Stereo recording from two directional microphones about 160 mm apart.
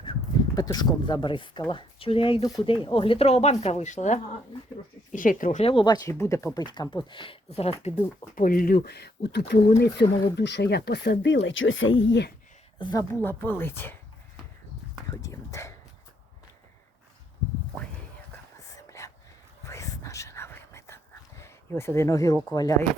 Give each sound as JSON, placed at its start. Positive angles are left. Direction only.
{"t": 0.0, "sound": "speech", "side_deg": 25}
{"t": 5.6, "sound": "speech", "side_deg": 30}
{"t": 8.4, "sound": "speech", "side_deg": 60}
{"t": 12.8, "sound": "speech", "side_deg": 25}
{"t": 13.2, "sound": "speech", "side_deg": 10}
{"t": 15.1, "sound": "speech", "side_deg": 20}
{"t": 18.8, "sound": "whispering", "side_deg": 20}
{"t": 22.5, "sound": "speech", "side_deg": 20}